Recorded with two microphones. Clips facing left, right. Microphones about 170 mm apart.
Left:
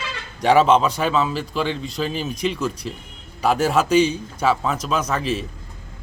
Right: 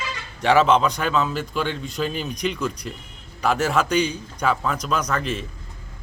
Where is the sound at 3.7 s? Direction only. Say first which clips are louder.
Left 4 dB; 10° left (ahead or behind).